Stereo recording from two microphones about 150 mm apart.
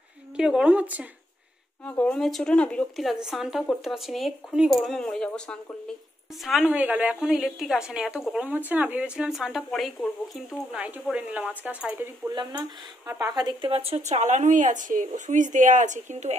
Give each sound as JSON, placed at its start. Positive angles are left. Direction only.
{"t": 0.4, "sound": "speech", "side_deg": -5}
{"t": 1.9, "sound": "a woman's voice", "side_deg": 10}
{"t": 12.3, "sound": "speech", "side_deg": -30}
{"t": 13.0, "sound": "speech", "side_deg": -20}
{"t": 13.7, "sound": "speech", "side_deg": -40}